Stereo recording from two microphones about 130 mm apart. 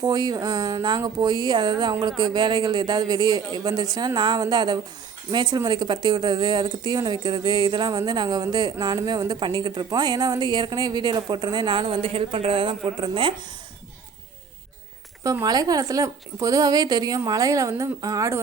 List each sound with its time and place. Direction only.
0.0 s speech: 30° right (ahead or behind)
15.2 s speech: 25° right (ahead or behind)